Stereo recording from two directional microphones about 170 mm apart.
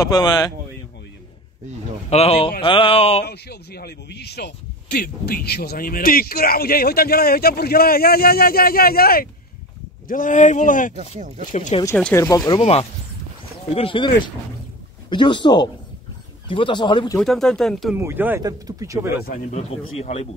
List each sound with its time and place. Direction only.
0.0 s speech: 25° left (ahead or behind)
2.0 s speech: 35° left (ahead or behind)
3.3 s speech: 70° left (ahead or behind)
10.0 s speech: 50° left (ahead or behind)
11.1 s speech: 45° right (ahead or behind)
11.5 s speech: 45° left (ahead or behind)
12.0 s speech: 15° left (ahead or behind)
13.7 s speech: 30° left (ahead or behind)
17.2 s speech: 5° left (ahead or behind)
17.9 s speech: 10° right (ahead or behind)
19.2 s speech: 45° left (ahead or behind)